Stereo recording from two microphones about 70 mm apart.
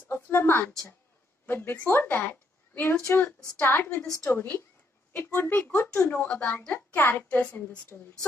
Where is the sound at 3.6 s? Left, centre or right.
Left.